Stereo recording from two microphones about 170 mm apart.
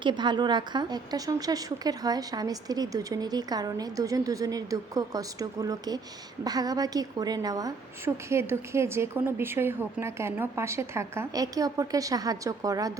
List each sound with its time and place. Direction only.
0.0 s a woman's voice: 25° right (ahead or behind)